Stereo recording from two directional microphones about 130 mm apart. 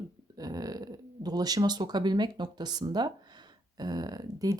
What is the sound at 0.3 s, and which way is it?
Speech, 30° right (ahead or behind).